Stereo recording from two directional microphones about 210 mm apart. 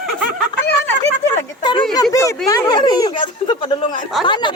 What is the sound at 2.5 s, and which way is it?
Speech, 20° left (ahead or behind).